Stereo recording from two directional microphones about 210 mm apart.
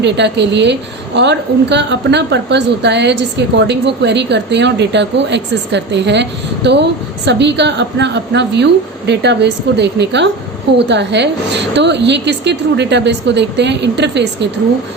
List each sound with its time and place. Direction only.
0.0 s a woman's voice: 55° right (ahead or behind)